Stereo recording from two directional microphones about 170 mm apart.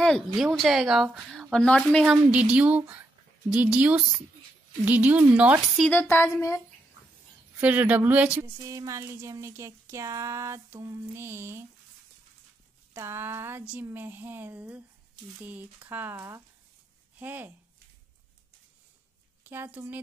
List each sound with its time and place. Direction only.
0.0 s a woman's voice: centre (ahead or behind)
5.9 s speech: 10° left (ahead or behind)
7.6 s speech: 10° right (ahead or behind)
12.9 s speech: 15° right (ahead or behind)
19.4 s a woman's voice: 10° right (ahead or behind)